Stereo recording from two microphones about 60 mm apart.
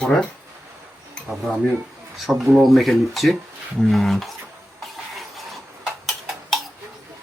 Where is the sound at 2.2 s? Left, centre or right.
Centre.